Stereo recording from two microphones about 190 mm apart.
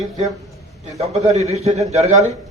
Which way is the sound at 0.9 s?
35° right (ahead or behind).